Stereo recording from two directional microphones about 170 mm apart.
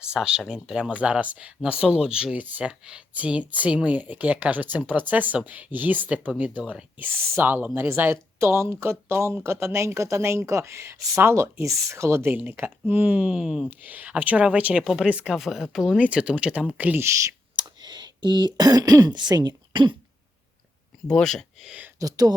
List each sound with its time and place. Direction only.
0.0 s speech: 5° right (ahead or behind); by 20.0 s 25° right (ahead or behind)
21.1 s speech: 5° left (ahead or behind)
21.9 s speech: 20° right (ahead or behind)